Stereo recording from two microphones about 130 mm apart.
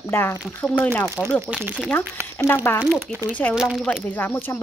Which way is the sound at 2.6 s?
15° left (ahead or behind).